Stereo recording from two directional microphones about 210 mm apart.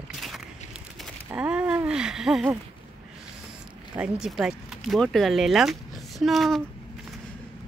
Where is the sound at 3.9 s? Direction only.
5° right (ahead or behind).